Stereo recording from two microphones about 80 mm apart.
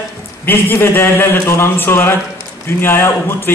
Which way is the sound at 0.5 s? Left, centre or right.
Left.